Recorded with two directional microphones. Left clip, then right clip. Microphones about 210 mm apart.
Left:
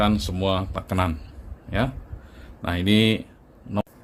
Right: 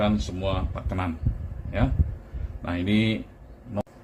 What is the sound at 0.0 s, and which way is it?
Speech, 55° left (ahead or behind).